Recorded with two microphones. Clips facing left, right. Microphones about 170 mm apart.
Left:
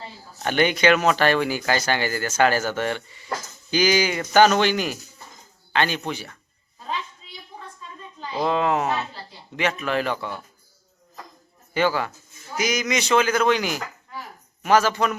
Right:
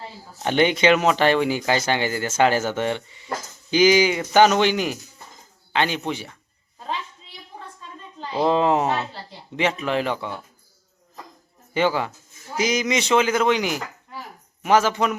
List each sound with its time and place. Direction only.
0.4 s speech: 25° right (ahead or behind)
8.4 s speech: 30° right (ahead or behind)
11.7 s speech: 20° right (ahead or behind)